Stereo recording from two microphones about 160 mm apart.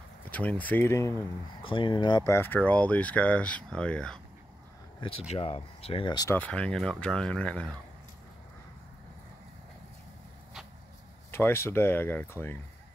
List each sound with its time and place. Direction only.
0.3 s speech: 10° left (ahead or behind)
1.6 s speech: 30° left (ahead or behind); by 4.2 s 5° left (ahead or behind)
5.3 s speech: 35° left (ahead or behind)
6.3 s speech: 10° left (ahead or behind)
11.3 s speech: 15° left (ahead or behind)